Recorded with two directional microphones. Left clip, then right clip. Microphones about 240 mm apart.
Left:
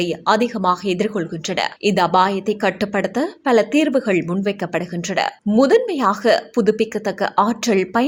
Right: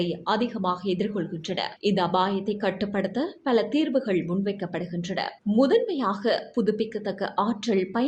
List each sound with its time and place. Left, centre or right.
0.0 s speech: left